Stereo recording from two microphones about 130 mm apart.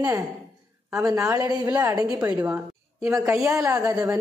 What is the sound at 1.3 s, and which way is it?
Speech, 25° right (ahead or behind).